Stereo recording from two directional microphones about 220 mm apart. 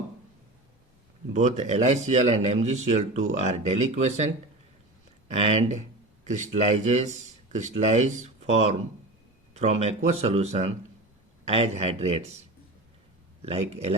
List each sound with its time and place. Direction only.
1.3 s speech: 30° right (ahead or behind)
5.3 s speech: 30° right (ahead or behind)
13.4 s speech: 30° right (ahead or behind)